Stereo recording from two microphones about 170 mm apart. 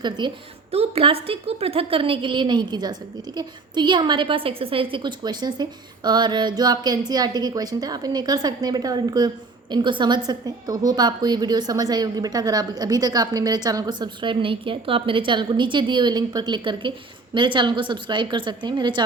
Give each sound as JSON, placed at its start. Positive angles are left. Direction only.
{"t": 0.2, "sound": "a woman's voice", "side_deg": -25}